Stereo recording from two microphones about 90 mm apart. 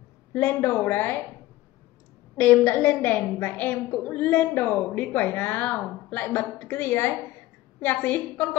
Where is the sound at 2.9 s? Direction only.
20° left (ahead or behind).